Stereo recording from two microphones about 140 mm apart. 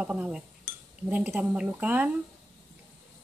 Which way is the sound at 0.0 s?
10° right (ahead or behind).